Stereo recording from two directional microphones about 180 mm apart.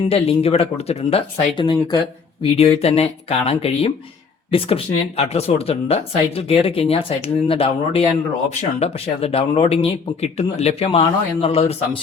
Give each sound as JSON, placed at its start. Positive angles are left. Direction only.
{"t": 0.1, "sound": "speech", "side_deg": 35}